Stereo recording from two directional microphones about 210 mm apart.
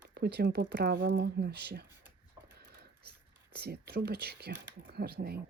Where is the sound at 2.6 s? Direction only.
50° right (ahead or behind).